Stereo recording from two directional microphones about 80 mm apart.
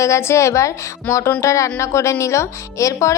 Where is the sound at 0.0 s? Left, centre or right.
Left.